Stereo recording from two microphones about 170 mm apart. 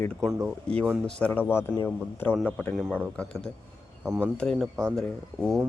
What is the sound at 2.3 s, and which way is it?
Speech, 5° right (ahead or behind).